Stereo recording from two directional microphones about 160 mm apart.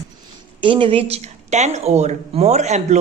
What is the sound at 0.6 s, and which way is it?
Speech, 30° right (ahead or behind).